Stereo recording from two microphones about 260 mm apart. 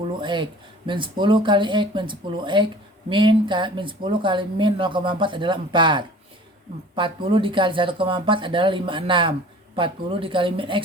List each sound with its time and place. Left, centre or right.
0.2 s speech: centre